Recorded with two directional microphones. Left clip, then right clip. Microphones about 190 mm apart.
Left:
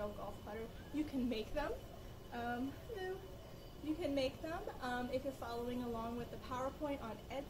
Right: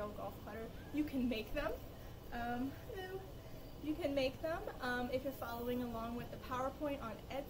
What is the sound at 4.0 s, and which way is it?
A woman's voice, 15° right (ahead or behind).